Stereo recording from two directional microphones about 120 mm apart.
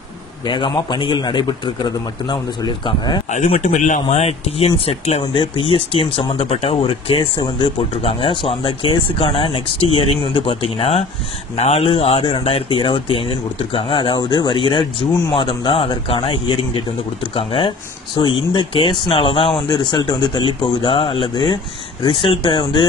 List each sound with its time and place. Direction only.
0.5 s a man's voice: 40° left (ahead or behind)
3.3 s speech: 80° left; by 5.2 s 60° left (ahead or behind)
5.2 s speech: 40° left (ahead or behind)